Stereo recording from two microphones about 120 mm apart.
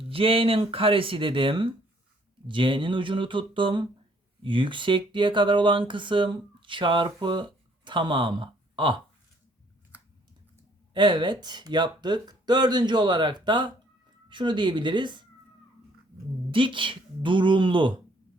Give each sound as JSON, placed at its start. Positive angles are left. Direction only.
{"t": 0.1, "sound": "speech", "side_deg": -50}
{"t": 10.9, "sound": "speech", "side_deg": -40}
{"t": 16.5, "sound": "speech", "side_deg": -45}